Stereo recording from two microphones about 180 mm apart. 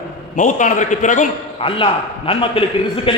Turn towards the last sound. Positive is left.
turn(degrees=30)  # may be behind; listen again after turning